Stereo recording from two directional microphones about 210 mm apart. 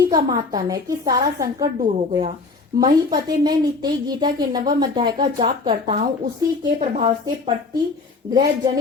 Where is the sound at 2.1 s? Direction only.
30° right (ahead or behind).